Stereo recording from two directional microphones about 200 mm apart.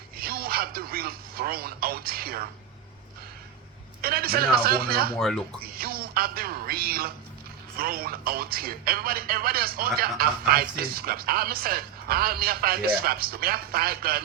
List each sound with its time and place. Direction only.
0.2 s speech: 50° right (ahead or behind)
4.0 s speech: 50° right (ahead or behind)
5.1 s speech: centre (ahead or behind)
5.6 s speech: 50° right (ahead or behind)